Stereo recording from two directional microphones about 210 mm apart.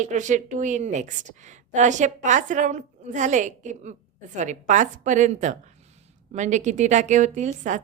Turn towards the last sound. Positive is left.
turn(degrees=-35)  # may be behind; listen again after turning